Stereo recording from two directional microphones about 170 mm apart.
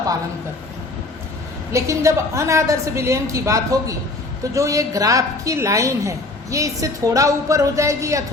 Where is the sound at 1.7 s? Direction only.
15° right (ahead or behind).